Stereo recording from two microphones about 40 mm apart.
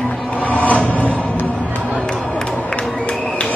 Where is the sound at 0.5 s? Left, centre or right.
Left.